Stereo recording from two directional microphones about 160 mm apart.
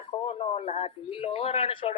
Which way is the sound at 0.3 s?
40° left (ahead or behind).